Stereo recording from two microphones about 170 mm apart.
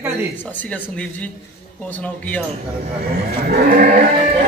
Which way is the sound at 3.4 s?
55° right (ahead or behind).